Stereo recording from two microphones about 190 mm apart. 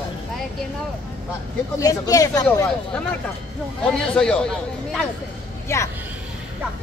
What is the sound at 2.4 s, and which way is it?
Speech, 5° left (ahead or behind).